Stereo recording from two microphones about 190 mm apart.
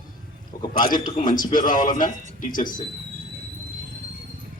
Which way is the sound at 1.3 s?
45° left (ahead or behind).